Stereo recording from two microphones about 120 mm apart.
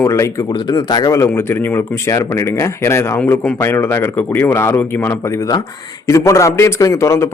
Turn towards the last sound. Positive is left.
turn(degrees=25)  # may be behind; listen again after turning